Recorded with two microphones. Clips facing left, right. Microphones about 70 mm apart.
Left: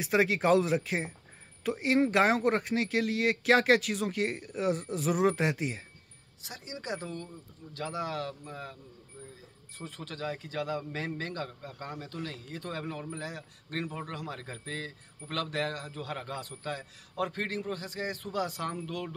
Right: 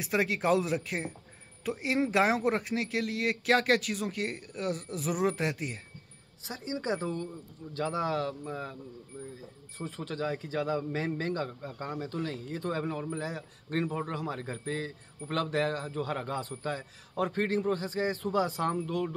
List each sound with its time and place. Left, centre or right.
0.0 s speech: centre
6.4 s a man's voice: right
9.8 s a man's voice: right